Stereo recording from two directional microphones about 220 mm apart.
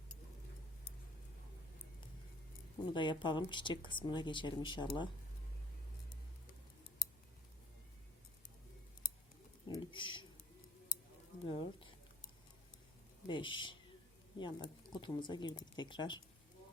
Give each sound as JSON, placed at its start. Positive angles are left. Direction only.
{"t": 2.9, "sound": "speech", "side_deg": 20}
{"t": 9.6, "sound": "a sound", "side_deg": 20}
{"t": 11.4, "sound": "speech", "side_deg": 25}
{"t": 13.2, "sound": "speech", "side_deg": 20}